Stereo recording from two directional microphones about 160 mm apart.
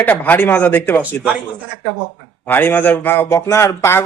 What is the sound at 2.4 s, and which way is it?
A man's voice, 10° left (ahead or behind).